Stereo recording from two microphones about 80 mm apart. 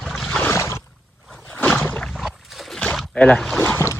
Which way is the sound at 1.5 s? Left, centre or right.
Left.